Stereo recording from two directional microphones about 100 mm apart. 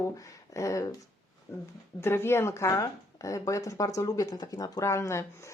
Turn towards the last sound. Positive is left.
turn(degrees=30)  # may be behind; listen again after turning